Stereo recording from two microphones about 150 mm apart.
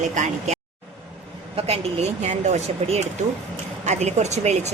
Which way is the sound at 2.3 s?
50° right (ahead or behind).